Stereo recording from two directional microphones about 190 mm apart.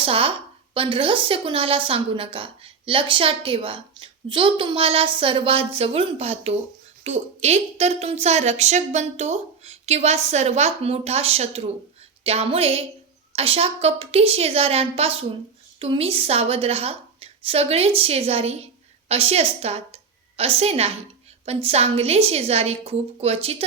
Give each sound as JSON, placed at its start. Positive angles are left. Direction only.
{"t": 0.0, "sound": "a woman's voice", "side_deg": -30}